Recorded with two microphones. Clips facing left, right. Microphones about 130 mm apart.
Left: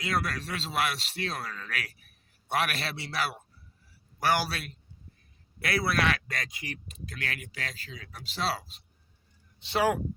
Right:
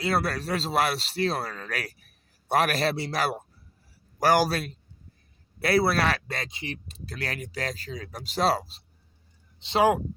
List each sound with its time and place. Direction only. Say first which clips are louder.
0.0 s a man's voice: right 5 dB; 35° right (ahead or behind)
9.6 s speech: right 5 dB; 20° right (ahead or behind)